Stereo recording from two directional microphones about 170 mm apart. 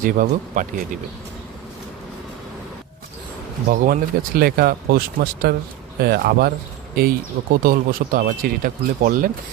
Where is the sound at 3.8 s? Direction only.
60° right (ahead or behind).